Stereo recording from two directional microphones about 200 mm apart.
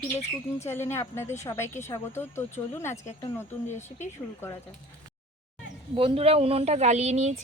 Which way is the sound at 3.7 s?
35° left (ahead or behind).